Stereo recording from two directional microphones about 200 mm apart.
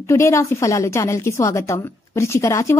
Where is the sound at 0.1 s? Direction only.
15° left (ahead or behind).